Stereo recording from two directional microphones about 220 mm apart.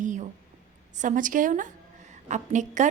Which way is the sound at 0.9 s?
35° right (ahead or behind).